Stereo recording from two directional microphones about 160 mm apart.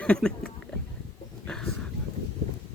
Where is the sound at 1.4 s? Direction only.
5° left (ahead or behind).